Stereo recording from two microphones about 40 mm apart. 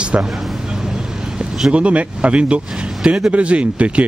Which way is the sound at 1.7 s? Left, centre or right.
Right.